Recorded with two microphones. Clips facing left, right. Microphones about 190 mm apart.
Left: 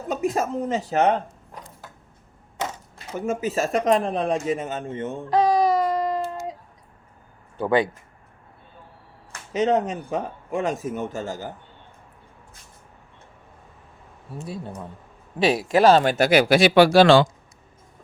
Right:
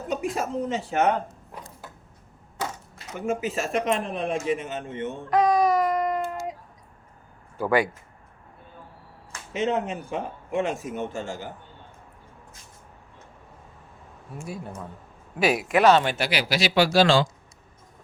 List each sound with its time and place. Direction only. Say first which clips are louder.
0.1 s speech: left 4 dB; 40° left (ahead or behind)
2.6 s speech: left 2 dB; 30° left (ahead or behind)
7.6 s speech: left 2 dB; 25° left (ahead or behind)
9.5 s speech: left 4 dB; 40° left (ahead or behind)
14.3 s speech: left 2 dB; 25° left (ahead or behind); by 17.2 s 60° left (ahead or behind)